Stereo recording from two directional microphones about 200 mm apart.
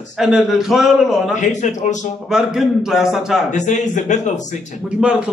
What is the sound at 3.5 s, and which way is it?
Speech, 35° left (ahead or behind).